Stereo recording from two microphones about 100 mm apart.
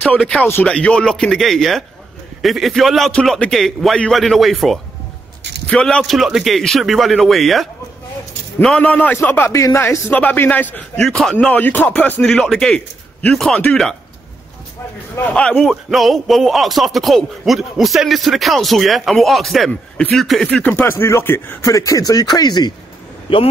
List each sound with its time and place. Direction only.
0.5 s a man's voice: 20° left (ahead or behind); by 4.7 s centre (ahead or behind)
5.7 s a man's voice: 10° left (ahead or behind)
8.7 s a man's voice: 10° left (ahead or behind)
9.5 s speech: 30° left (ahead or behind)
10.1 s a man's voice: 20° left (ahead or behind)
11.0 s a man's voice: 5° left (ahead or behind)
11.3 s a man's voice: 15° left (ahead or behind)
15.1 s a man's voice: 15° left (ahead or behind)
20.4 s speech: 15° left (ahead or behind)
21.6 s speech: 35° left (ahead or behind)
23.3 s speech: 60° left (ahead or behind)